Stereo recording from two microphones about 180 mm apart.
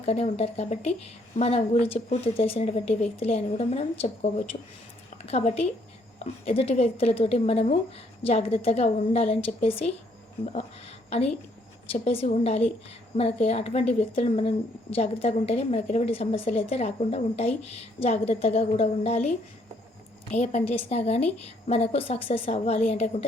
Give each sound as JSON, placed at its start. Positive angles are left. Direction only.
{"t": 0.0, "sound": "a woman's voice", "side_deg": 35}
{"t": 11.9, "sound": "a woman's voice", "side_deg": 35}
{"t": 20.4, "sound": "a woman's voice", "side_deg": 40}